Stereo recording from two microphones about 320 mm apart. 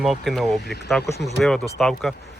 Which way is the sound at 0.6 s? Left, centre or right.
Left.